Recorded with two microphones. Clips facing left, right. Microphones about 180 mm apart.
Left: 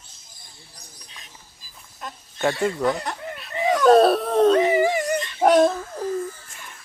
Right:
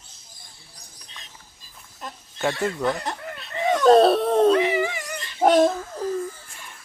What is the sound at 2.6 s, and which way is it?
Speech, 10° left (ahead or behind).